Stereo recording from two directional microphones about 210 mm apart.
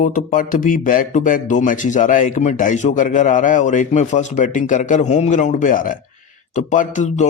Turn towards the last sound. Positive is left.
turn(degrees=35)  # may be behind; listen again after turning